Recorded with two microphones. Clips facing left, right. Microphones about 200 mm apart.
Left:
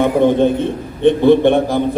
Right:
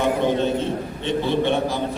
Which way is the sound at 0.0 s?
55° left (ahead or behind).